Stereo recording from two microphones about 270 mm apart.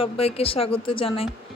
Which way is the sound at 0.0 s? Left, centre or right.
Left.